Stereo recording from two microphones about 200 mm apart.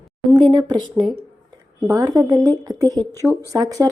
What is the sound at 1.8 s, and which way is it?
Speech, 15° right (ahead or behind).